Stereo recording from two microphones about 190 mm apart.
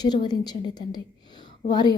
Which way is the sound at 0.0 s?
20° left (ahead or behind).